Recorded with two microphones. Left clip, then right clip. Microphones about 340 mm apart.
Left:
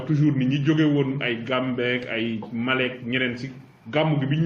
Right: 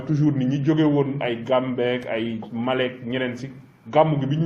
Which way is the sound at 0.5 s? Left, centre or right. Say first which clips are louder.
Right 3 dB; centre.